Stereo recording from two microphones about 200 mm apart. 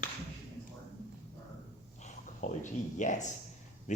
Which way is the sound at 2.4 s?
40° left (ahead or behind).